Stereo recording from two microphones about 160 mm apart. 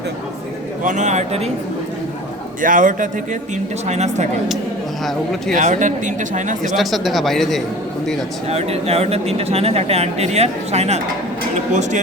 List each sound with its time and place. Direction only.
0.9 s speech: 50° right (ahead or behind)
2.6 s a man's voice: 55° right (ahead or behind)
3.8 s speech: 45° right (ahead or behind)
5.5 s speech: 50° right (ahead or behind)
6.7 s speech: centre (ahead or behind)
8.4 s speech: 40° right (ahead or behind)